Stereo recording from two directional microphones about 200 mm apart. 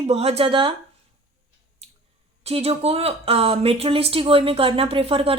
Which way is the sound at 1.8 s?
35° right (ahead or behind).